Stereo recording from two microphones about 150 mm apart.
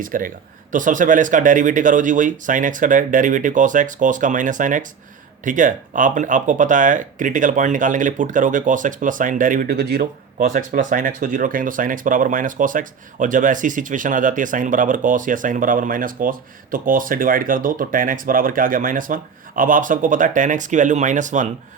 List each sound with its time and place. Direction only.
0.0 s speech: 65° right (ahead or behind); by 10.1 s 90° right
10.4 s speech: 60° right (ahead or behind)